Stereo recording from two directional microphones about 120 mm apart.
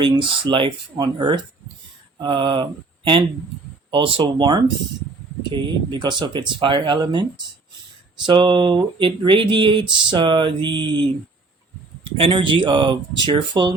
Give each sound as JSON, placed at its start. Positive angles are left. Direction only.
{"t": 0.0, "sound": "speech", "side_deg": -40}
{"t": 9.9, "sound": "a sound", "side_deg": -40}
{"t": 12.1, "sound": "speech", "side_deg": -45}